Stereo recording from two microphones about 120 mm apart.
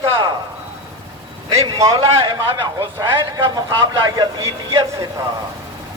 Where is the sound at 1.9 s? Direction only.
45° right (ahead or behind).